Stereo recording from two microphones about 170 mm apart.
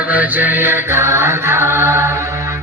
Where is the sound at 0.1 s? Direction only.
10° right (ahead or behind).